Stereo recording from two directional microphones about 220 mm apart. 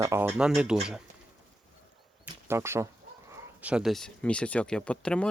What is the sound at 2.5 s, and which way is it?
Speech, 10° right (ahead or behind).